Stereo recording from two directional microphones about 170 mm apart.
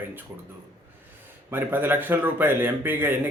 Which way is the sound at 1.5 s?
10° right (ahead or behind).